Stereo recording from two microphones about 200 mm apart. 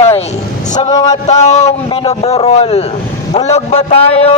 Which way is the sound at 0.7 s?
20° left (ahead or behind).